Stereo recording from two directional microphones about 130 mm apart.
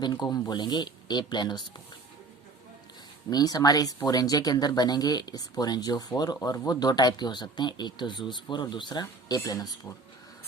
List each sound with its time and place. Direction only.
0.0 s speech: 35° left (ahead or behind)
3.2 s speech: 30° left (ahead or behind)